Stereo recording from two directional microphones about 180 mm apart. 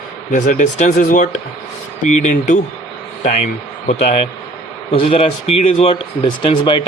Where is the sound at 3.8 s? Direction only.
40° left (ahead or behind).